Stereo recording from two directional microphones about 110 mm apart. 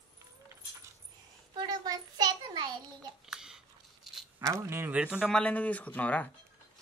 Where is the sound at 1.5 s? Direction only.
40° right (ahead or behind).